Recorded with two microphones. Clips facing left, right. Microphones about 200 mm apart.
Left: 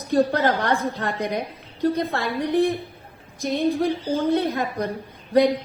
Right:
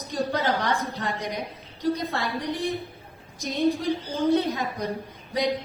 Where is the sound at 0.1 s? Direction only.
60° left (ahead or behind).